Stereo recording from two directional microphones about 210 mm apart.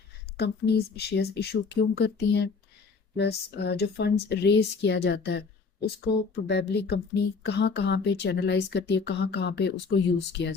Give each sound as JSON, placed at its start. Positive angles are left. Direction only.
{"t": 0.3, "sound": "speech", "side_deg": 50}